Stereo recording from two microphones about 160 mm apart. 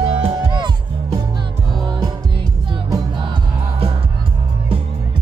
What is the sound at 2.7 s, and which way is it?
Music, 30° right (ahead or behind).